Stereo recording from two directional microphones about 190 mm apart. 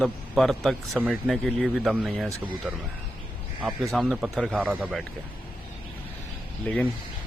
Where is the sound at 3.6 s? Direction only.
Centre (ahead or behind).